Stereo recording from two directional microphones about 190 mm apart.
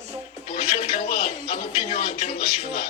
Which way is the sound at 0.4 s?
35° left (ahead or behind).